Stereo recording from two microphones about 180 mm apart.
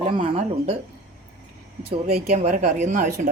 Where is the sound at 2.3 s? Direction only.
40° right (ahead or behind).